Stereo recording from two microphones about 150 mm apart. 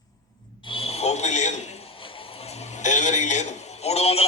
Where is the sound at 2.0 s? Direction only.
35° left (ahead or behind).